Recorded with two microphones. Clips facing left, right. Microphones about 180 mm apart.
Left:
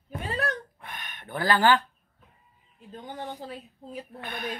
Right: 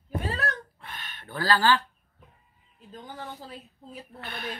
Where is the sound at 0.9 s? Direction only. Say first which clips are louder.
Left 3 dB; 15° left (ahead or behind).